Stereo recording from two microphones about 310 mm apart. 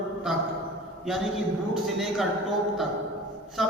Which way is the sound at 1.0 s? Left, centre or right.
Centre.